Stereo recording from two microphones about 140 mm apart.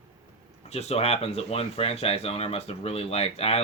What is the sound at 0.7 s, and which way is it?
Speech, 45° left (ahead or behind).